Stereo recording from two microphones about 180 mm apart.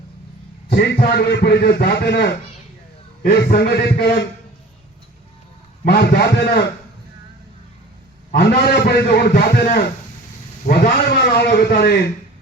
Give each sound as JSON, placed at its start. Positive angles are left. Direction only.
{"t": 0.7, "sound": "a man's voice", "side_deg": 65}
{"t": 5.8, "sound": "speech", "side_deg": 65}
{"t": 8.3, "sound": "speech", "side_deg": 65}
{"t": 10.7, "sound": "speech", "side_deg": 60}